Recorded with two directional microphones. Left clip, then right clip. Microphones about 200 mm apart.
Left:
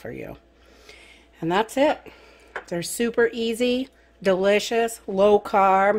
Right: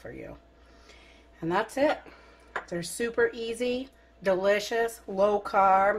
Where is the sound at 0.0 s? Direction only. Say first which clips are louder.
Left 7 dB; 60° left (ahead or behind).